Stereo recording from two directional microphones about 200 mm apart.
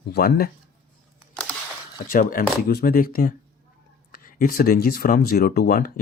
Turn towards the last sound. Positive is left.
turn(degrees=45)  # may be behind; listen again after turning